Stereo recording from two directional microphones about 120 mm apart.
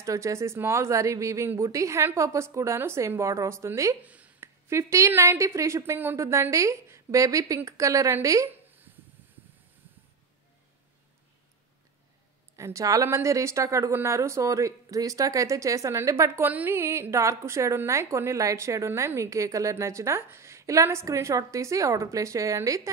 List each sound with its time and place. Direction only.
0.0 s speech: 25° right (ahead or behind)
4.0 s speech: 10° right (ahead or behind)
12.5 s speech: 25° right (ahead or behind)